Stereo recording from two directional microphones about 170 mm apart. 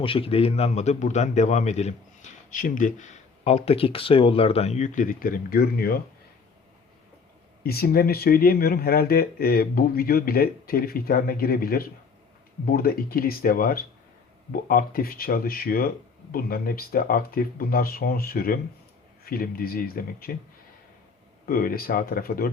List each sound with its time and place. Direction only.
0.0 s a man's voice: 30° left (ahead or behind); by 6.0 s 65° left (ahead or behind)
7.6 s speech: 65° left (ahead or behind)
21.4 s speech: 60° left (ahead or behind)